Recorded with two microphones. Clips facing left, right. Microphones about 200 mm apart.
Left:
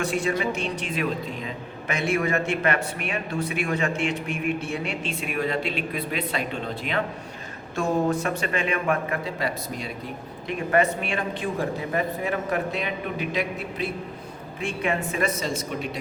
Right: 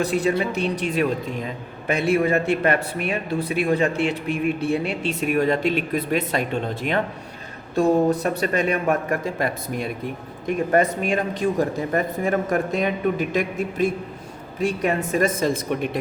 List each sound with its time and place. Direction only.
0.0 s a man's voice: 35° right (ahead or behind)
7.8 s a man's voice: 35° right (ahead or behind); by 9.9 s 55° right (ahead or behind)
10.4 s a man's voice: 40° right (ahead or behind)